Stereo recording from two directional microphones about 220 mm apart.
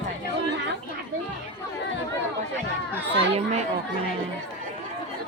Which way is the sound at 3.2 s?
30° right (ahead or behind).